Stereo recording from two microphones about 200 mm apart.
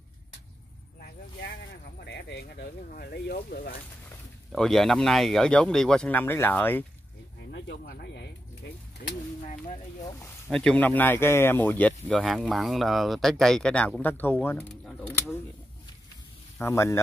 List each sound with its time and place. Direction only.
2.0 s speech: 55° left (ahead or behind)
4.5 s speech: centre (ahead or behind)
7.5 s speech: 55° left (ahead or behind)
10.5 s speech: 5° left (ahead or behind)
16.5 s speech: 10° left (ahead or behind)